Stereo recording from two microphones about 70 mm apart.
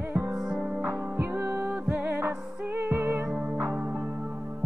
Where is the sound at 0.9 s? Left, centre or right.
Right.